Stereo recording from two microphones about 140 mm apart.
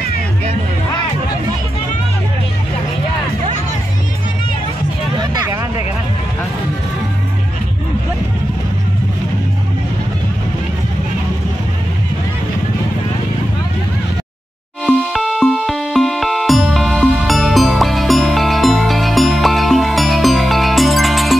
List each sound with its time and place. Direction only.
5.1 s vehicle: 30° right (ahead or behind)
14.9 s music: centre (ahead or behind)